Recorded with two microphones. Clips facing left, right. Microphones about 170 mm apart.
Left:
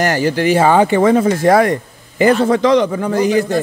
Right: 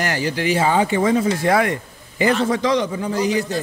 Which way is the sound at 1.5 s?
40° left (ahead or behind).